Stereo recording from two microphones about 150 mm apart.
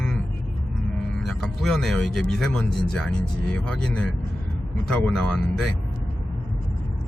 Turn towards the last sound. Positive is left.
turn(degrees=5)  # may be behind; listen again after turning